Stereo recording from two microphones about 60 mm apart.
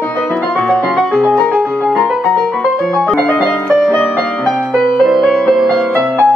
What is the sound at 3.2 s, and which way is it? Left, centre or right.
Music, centre.